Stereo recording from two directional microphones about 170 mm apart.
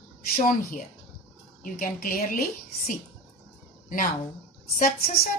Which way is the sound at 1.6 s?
55° left (ahead or behind).